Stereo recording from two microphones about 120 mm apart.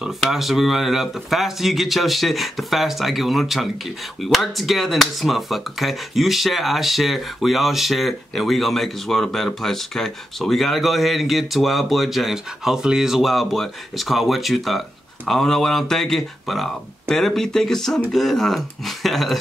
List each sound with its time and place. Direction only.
0.0 s speech: centre (ahead or behind)